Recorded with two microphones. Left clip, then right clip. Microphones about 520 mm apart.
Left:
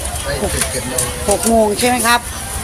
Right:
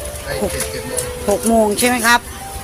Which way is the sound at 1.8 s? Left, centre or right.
Right.